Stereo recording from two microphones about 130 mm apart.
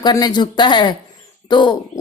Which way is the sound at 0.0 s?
30° left (ahead or behind).